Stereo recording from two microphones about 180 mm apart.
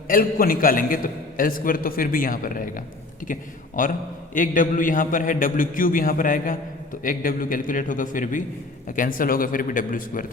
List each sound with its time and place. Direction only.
0.1 s a man's voice: 50° left (ahead or behind)